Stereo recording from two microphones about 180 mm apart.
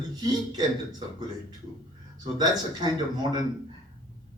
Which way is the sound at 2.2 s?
25° right (ahead or behind).